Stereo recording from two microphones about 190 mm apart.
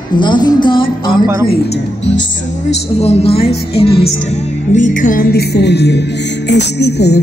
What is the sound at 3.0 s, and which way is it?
A woman's voice, 30° left (ahead or behind).